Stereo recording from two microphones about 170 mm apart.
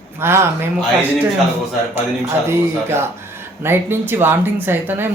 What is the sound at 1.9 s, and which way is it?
Speech, 15° right (ahead or behind).